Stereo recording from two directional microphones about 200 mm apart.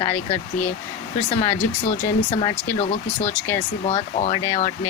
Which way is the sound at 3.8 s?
30° left (ahead or behind).